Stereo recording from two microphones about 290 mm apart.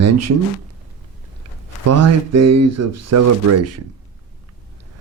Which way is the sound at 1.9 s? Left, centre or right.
Right.